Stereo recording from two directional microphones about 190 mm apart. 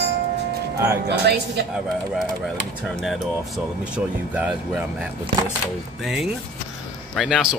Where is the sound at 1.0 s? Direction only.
60° right (ahead or behind).